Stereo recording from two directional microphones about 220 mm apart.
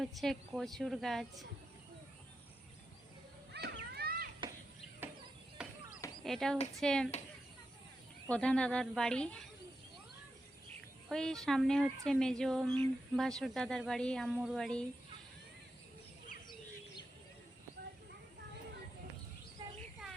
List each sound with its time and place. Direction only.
0.0 s a woman's voice: centre (ahead or behind)
3.5 s children playing: 45° right (ahead or behind)
5.6 s a sound: 5° right (ahead or behind)
6.2 s a woman's voice: centre (ahead or behind)
8.3 s a woman's voice: 5° left (ahead or behind)
11.1 s a woman's voice: centre (ahead or behind)
20.0 s a sound: centre (ahead or behind)